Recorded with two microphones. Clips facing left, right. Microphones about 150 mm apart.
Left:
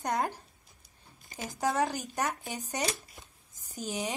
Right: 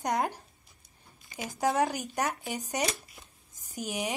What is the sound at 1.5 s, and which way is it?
Speech, 20° right (ahead or behind).